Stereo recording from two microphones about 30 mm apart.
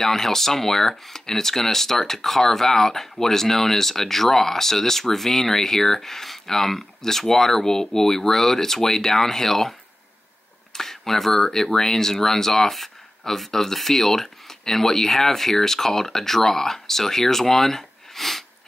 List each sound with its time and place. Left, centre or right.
0.0 s speech: centre
10.7 s speech: centre